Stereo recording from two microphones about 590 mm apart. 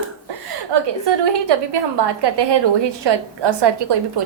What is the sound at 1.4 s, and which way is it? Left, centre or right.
A woman's voice, right.